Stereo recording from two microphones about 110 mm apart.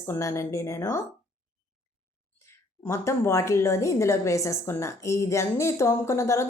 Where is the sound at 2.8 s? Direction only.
25° left (ahead or behind).